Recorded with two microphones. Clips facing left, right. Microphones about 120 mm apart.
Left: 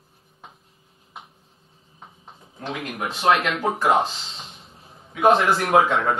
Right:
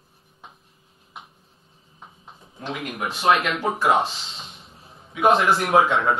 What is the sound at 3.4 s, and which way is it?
Speech, 55° left (ahead or behind).